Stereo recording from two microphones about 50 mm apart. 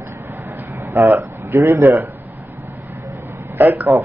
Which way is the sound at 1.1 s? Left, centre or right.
Right.